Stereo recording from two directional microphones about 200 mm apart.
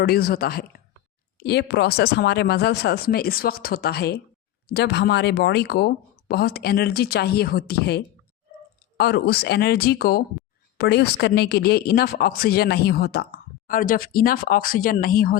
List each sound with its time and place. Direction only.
0.0 s speech: 50° left (ahead or behind)